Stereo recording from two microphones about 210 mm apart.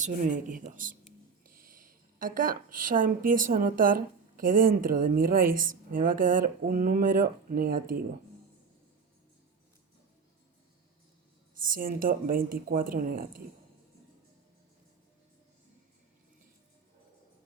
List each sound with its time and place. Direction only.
0.0 s speech: 40° right (ahead or behind)
11.5 s speech: 40° right (ahead or behind)